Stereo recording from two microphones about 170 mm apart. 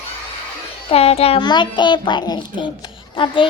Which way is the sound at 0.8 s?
35° left (ahead or behind).